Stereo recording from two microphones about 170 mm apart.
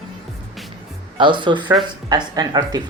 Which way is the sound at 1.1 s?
30° right (ahead or behind).